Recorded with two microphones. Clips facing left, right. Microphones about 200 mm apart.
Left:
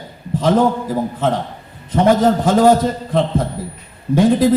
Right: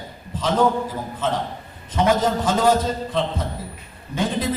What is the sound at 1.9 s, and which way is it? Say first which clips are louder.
A man's voice: left 6 dB; 55° left (ahead or behind).